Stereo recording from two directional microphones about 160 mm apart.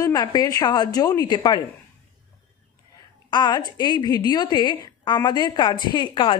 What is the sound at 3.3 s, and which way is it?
A woman's voice, 30° left (ahead or behind).